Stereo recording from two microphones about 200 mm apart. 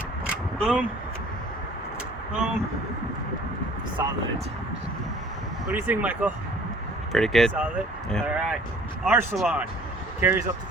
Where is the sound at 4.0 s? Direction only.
15° right (ahead or behind).